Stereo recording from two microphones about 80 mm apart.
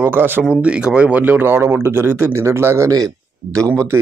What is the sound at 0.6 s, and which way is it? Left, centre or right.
A man's voice, centre.